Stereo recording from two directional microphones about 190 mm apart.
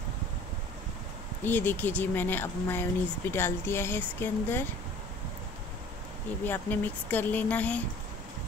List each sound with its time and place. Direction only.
1.4 s speech: 10° left (ahead or behind)
6.4 s speech: 10° left (ahead or behind)